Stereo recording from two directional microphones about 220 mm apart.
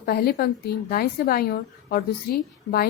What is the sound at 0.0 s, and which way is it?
A woman's voice, 45° left (ahead or behind).